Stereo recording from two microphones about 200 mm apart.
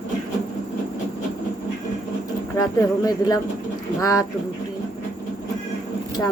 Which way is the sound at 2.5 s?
15° left (ahead or behind).